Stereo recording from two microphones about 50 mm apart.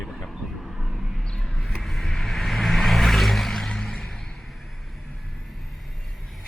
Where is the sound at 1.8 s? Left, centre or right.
Centre.